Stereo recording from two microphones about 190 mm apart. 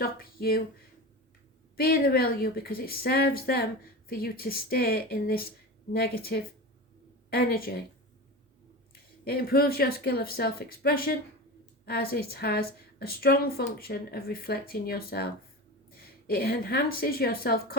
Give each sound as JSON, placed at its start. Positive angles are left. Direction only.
{"t": 0.0, "sound": "speech", "side_deg": 50}
{"t": 1.7, "sound": "speech", "side_deg": 50}
{"t": 9.2, "sound": "a woman's voice", "side_deg": 50}